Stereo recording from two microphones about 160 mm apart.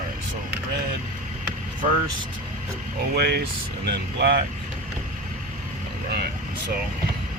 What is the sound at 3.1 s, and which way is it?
Speech, 90° right.